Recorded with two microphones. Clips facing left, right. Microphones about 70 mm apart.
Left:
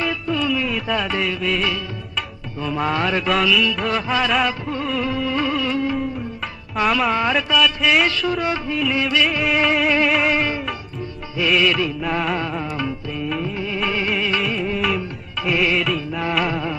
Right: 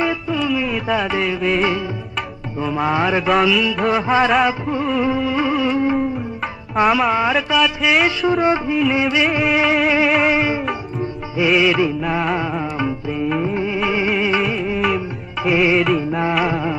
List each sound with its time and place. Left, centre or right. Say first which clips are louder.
0.0 s music: right 2 dB; centre
2.6 s music: right 3 dB; centre
3.3 s a sound: right 3 dB; centre
3.9 s music: right 8 dB; right
4.6 s a sound: right 4 dB; centre
5.0 s music: right 3 dB; centre
6.9 s music: right 1 dB; centre
7.5 s a sound: even; centre
8.3 s music: right 6 dB; right
9.4 s music: right 2 dB; centre
11.3 s music: right 3 dB; centre
12.4 s music: right 3 dB; centre
13.8 s music: right 2 dB; centre
14.4 s music: right 3 dB; centre